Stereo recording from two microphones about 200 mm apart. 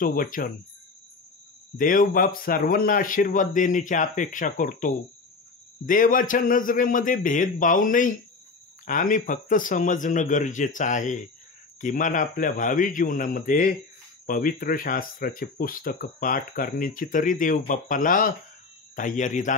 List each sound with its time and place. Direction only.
0.0 s speech: 45° left (ahead or behind)
1.8 s speech: 45° left (ahead or behind)